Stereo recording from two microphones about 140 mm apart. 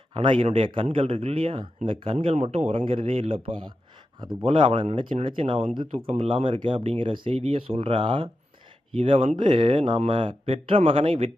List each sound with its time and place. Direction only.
0.2 s speech: 40° right (ahead or behind)
4.9 s speech: 50° right (ahead or behind)